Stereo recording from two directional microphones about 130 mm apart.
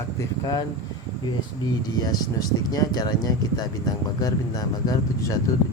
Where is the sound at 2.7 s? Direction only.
30° left (ahead or behind).